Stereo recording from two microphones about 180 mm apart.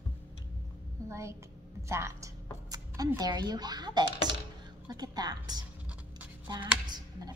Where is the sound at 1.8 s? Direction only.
15° right (ahead or behind).